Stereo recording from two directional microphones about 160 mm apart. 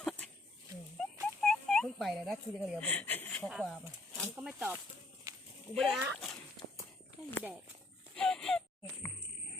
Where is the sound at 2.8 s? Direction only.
10° left (ahead or behind).